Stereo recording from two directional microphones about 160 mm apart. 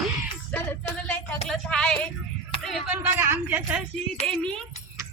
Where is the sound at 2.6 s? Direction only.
Centre (ahead or behind).